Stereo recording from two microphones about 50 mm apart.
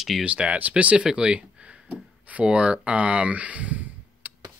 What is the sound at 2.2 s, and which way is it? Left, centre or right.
Speech, right.